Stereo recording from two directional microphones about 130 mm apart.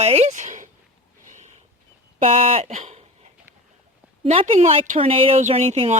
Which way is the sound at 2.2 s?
55° right (ahead or behind).